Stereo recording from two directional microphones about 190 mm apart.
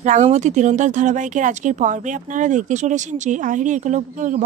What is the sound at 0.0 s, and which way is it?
Speech, 40° right (ahead or behind).